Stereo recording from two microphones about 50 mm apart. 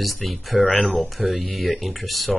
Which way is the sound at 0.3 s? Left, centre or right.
Centre.